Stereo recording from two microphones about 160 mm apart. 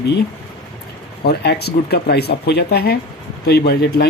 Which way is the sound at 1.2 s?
85° left.